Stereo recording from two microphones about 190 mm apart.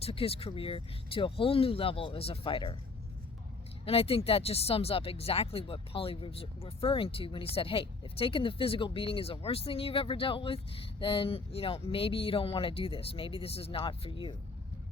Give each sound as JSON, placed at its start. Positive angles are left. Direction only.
{"t": 0.0, "sound": "speech", "side_deg": 30}
{"t": 3.8, "sound": "speech", "side_deg": 30}